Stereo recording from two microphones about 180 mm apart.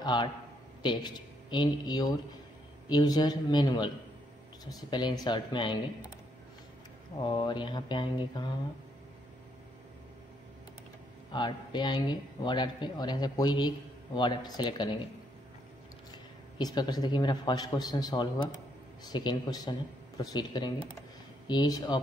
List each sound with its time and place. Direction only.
0.0 s a man's voice: 25° left (ahead or behind)
7.2 s a man's voice: 25° left (ahead or behind)
11.3 s a man's voice: 25° left (ahead or behind)
16.1 s a man's voice: 25° left (ahead or behind)